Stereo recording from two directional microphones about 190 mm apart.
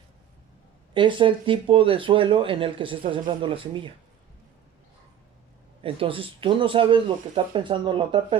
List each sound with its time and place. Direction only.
0.9 s speech: 25° right (ahead or behind)
5.8 s speech: 30° right (ahead or behind)